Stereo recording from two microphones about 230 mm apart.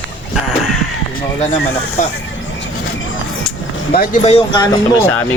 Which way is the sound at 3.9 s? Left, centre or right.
Left.